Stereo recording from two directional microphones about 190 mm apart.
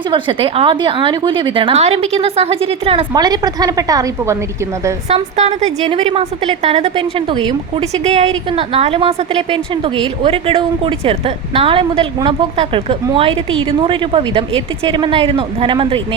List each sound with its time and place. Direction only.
0.1 s a woman's voice: 25° right (ahead or behind)
5.0 s a woman's voice: 35° right (ahead or behind)